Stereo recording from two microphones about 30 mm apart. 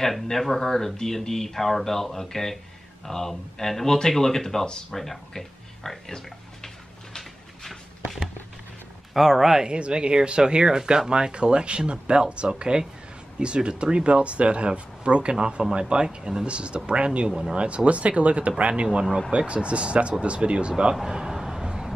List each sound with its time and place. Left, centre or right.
0.1 s speech: centre
9.1 s speech: centre
9.7 s speech: right
16.4 s speech: right
21.1 s speech: right
21.4 s a sound: centre